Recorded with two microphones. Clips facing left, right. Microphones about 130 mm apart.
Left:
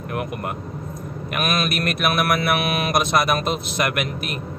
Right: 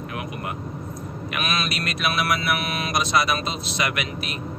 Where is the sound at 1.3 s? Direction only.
50° left (ahead or behind).